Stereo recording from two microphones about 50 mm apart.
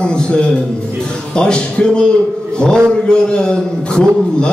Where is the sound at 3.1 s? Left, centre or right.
Centre.